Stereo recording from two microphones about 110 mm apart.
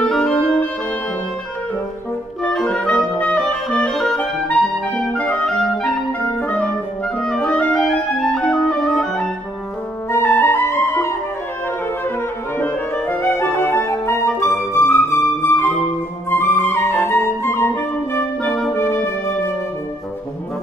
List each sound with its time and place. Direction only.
0.0 s music: 5° left (ahead or behind)
2.4 s clarinet: 5° left (ahead or behind)
6.4 s clarinet: 15° left (ahead or behind)
10.1 s music: 25° left (ahead or behind)
12.5 s clarinet: 20° left (ahead or behind)
14.4 s flute: 25° left (ahead or behind)
16.3 s music: 25° left (ahead or behind)
18.4 s music: centre (ahead or behind)
18.7 s music: 25° left (ahead or behind)